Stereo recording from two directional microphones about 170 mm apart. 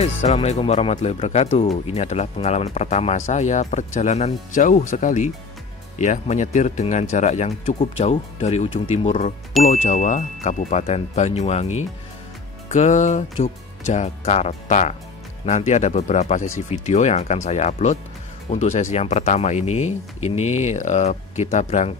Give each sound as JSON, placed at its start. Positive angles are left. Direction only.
{"t": 0.0, "sound": "speech", "side_deg": 40}